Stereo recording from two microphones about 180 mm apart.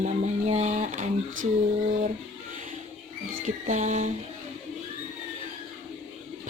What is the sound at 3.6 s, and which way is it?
Speech, 40° right (ahead or behind).